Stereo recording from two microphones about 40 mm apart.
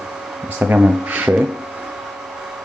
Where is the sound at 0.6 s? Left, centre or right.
Right.